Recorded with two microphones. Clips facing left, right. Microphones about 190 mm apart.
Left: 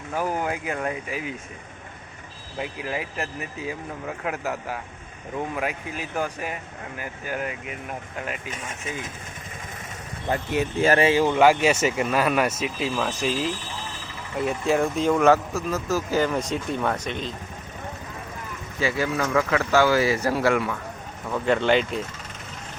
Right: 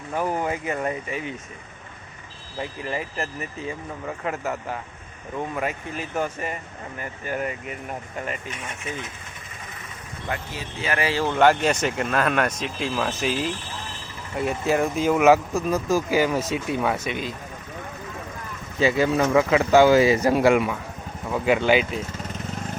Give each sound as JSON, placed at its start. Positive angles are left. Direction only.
{"t": 0.1, "sound": "speech", "side_deg": 5}
{"t": 2.6, "sound": "speech", "side_deg": 5}
{"t": 10.5, "sound": "speech", "side_deg": 65}
{"t": 10.9, "sound": "speech", "side_deg": 20}
{"t": 11.3, "sound": "speech", "side_deg": 5}
{"t": 18.8, "sound": "speech", "side_deg": -20}